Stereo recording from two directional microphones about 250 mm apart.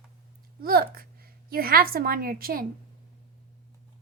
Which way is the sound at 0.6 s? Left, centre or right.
Right.